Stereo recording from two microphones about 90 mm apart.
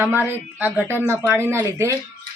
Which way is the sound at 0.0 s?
25° right (ahead or behind).